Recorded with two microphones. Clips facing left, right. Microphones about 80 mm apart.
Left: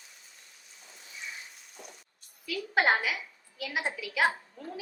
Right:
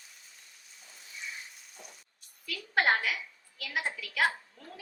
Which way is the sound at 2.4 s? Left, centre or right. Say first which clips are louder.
Left 2 dB; centre.